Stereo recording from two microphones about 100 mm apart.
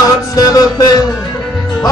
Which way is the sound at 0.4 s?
35° left (ahead or behind).